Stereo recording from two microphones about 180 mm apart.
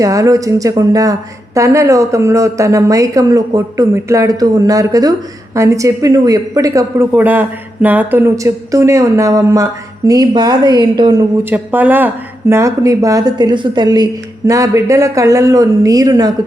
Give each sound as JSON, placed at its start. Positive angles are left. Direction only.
{"t": 0.0, "sound": "a woman's voice", "side_deg": -20}
{"t": 11.5, "sound": "speech", "side_deg": -10}